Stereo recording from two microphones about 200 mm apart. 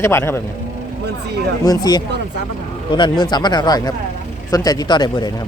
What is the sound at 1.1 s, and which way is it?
Speech, 55° right (ahead or behind).